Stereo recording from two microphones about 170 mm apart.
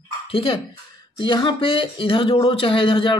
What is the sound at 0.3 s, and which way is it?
Speech, 30° left (ahead or behind).